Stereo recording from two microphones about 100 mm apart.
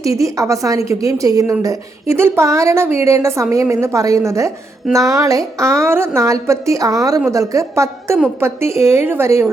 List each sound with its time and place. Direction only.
0.0 s a woman's voice: 30° right (ahead or behind)